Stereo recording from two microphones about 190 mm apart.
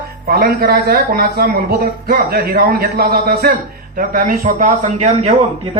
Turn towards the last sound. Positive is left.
turn(degrees=-35)  # may be behind; listen again after turning